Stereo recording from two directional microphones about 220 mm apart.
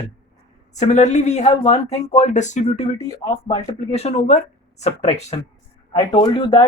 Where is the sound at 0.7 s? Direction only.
30° left (ahead or behind).